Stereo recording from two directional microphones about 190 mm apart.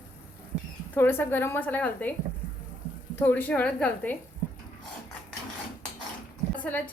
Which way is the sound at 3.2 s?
10° left (ahead or behind).